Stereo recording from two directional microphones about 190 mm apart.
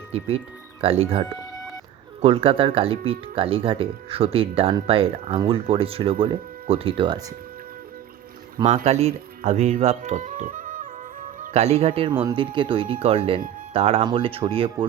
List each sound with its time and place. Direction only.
0.8 s speech: 30° right (ahead or behind)
2.2 s speech: 30° right (ahead or behind)
8.6 s speech: 35° right (ahead or behind)
11.3 s speech: 35° right (ahead or behind)